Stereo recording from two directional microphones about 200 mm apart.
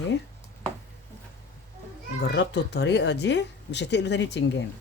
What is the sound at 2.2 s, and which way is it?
Speech, 60° left (ahead or behind).